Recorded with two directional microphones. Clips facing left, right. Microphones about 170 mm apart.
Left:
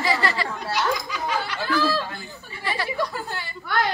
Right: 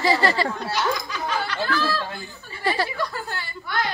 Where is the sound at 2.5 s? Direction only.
35° right (ahead or behind).